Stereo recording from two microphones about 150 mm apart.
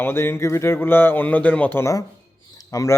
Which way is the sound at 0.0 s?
15° left (ahead or behind).